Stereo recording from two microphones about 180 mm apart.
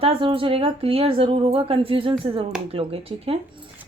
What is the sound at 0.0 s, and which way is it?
Speech, 30° right (ahead or behind).